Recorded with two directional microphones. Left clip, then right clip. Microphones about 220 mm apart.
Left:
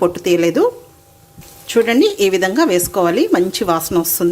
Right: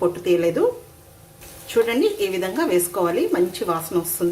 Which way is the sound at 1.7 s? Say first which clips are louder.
Left 6 dB; 35° left (ahead or behind).